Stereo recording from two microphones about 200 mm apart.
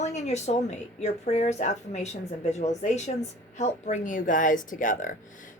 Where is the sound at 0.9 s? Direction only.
35° left (ahead or behind).